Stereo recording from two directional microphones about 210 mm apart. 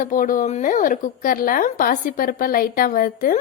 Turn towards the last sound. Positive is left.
turn(degrees=40)  # may be behind; listen again after turning